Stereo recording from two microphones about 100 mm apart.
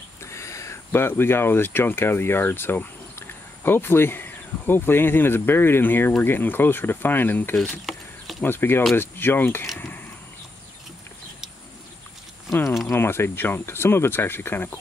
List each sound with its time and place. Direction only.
0.2 s speech: 30° left (ahead or behind)
12.8 s speech: 25° left (ahead or behind)